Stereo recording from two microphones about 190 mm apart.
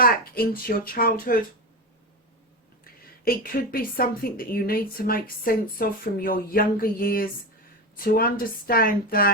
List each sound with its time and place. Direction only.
0.0 s a woman's voice: 50° left (ahead or behind)
2.8 s a woman's voice: 50° left (ahead or behind)